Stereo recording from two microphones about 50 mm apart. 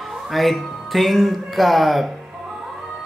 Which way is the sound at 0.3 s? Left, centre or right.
Centre.